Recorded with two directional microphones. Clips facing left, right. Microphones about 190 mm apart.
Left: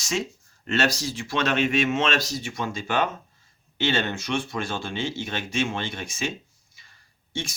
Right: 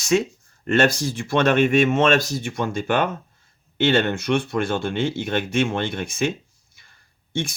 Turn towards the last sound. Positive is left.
turn(degrees=-55)  # may be behind; listen again after turning